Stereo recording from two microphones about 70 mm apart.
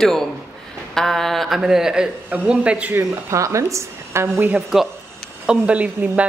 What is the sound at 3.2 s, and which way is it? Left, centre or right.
A woman's voice, right.